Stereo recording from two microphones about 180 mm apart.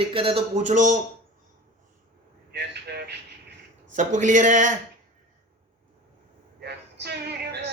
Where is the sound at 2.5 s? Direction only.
65° right (ahead or behind).